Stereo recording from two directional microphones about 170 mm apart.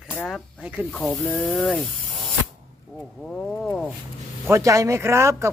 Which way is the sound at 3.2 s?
5° left (ahead or behind).